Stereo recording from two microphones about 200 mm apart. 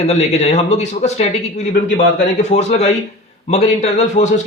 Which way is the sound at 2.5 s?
30° left (ahead or behind).